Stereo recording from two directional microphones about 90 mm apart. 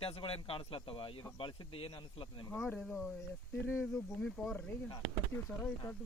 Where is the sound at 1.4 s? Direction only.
65° left (ahead or behind).